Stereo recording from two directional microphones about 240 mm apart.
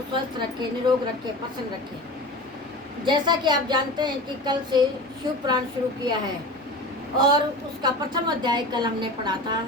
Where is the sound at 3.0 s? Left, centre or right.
Centre.